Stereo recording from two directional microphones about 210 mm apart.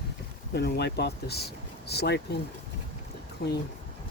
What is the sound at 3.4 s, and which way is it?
Speech, 50° left (ahead or behind).